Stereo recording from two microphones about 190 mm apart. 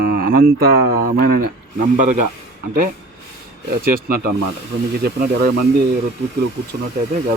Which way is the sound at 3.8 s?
50° right (ahead or behind).